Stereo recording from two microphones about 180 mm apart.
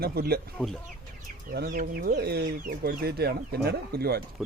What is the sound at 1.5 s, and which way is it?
Speech, 60° right (ahead or behind).